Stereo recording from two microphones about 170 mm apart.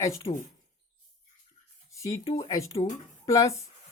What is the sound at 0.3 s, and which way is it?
Speech, 45° left (ahead or behind).